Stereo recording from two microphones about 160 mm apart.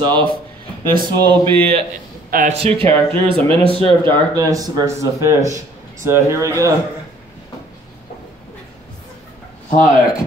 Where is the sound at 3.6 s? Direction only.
35° left (ahead or behind).